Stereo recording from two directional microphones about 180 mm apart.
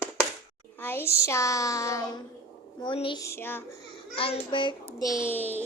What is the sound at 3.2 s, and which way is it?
Speech, 15° left (ahead or behind).